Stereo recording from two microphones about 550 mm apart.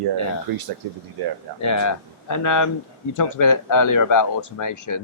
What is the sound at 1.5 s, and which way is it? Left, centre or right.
Speech, left.